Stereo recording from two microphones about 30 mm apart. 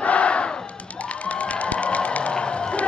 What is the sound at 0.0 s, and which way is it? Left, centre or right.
Battle cry, left.